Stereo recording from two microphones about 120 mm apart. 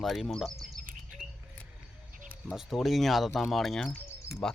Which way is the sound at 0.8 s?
90° right.